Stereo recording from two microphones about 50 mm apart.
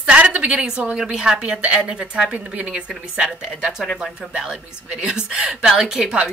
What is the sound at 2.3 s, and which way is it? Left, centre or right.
Speech, right.